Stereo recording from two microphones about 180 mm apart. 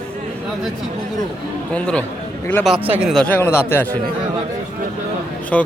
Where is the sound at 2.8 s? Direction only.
5° right (ahead or behind); by 3.9 s 10° left (ahead or behind).